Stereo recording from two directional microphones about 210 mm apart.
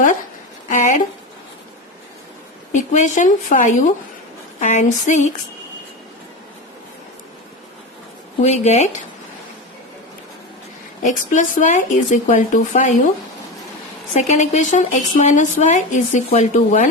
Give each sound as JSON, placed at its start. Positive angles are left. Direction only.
{"t": 0.7, "sound": "a sound", "side_deg": 35}
{"t": 2.7, "sound": "a woman's voice", "side_deg": 35}
{"t": 8.4, "sound": "a woman's voice", "side_deg": 35}
{"t": 11.0, "sound": "a woman's voice", "side_deg": 35}
{"t": 14.1, "sound": "a woman's voice", "side_deg": 35}